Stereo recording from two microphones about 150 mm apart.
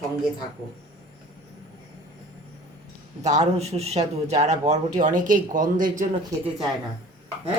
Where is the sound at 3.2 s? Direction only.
50° right (ahead or behind).